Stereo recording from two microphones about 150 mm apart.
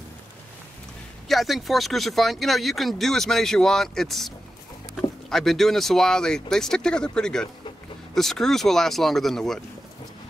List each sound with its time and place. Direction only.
1.3 s speech: centre (ahead or behind)
5.3 s speech: centre (ahead or behind)